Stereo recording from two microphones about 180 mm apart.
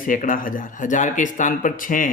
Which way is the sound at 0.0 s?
50° left (ahead or behind).